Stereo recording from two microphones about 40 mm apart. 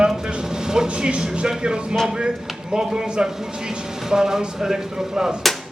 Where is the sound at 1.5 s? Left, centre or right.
Right.